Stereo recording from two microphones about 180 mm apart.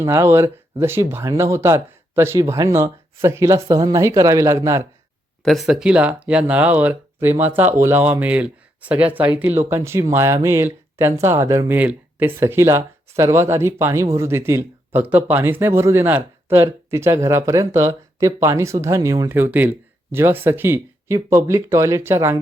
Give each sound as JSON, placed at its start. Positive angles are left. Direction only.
{"t": 0.0, "sound": "speech", "side_deg": -15}
{"t": 5.5, "sound": "speech", "side_deg": 0}